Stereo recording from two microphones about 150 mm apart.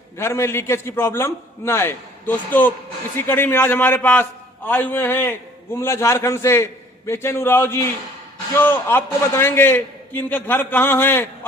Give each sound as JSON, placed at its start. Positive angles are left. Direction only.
{"t": 0.2, "sound": "a man's voice", "side_deg": 20}